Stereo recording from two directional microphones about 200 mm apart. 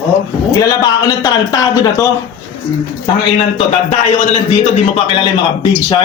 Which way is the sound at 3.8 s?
35° left (ahead or behind).